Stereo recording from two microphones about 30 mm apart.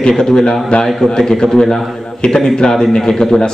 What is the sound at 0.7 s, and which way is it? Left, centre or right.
Speech, left.